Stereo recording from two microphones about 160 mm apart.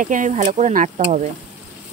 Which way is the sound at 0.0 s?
55° right (ahead or behind).